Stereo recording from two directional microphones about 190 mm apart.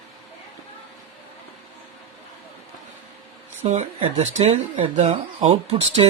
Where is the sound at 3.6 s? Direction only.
35° right (ahead or behind).